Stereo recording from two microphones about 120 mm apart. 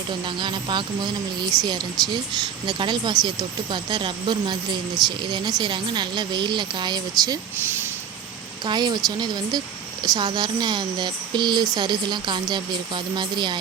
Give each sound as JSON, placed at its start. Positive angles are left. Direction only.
{"t": 0.3, "sound": "speech", "side_deg": -40}
{"t": 8.6, "sound": "speech", "side_deg": -35}